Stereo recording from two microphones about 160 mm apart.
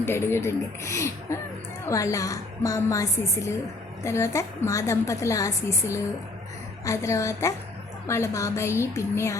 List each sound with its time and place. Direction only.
0.0 s a woman's voice: 15° left (ahead or behind)